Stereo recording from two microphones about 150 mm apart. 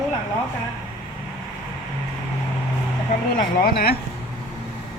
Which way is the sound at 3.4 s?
80° left.